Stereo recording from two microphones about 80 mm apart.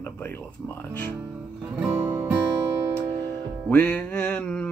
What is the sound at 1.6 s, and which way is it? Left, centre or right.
Music, centre.